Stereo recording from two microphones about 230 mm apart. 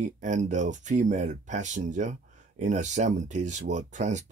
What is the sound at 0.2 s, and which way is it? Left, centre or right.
Speech, right.